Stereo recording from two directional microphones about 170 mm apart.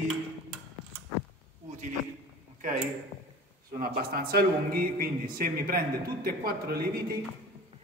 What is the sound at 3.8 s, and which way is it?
A man's voice, 60° right (ahead or behind).